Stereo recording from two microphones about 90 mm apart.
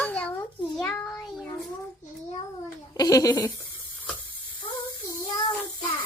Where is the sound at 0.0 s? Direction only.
15° left (ahead or behind).